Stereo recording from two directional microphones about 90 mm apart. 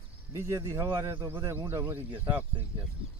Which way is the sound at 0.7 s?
35° right (ahead or behind).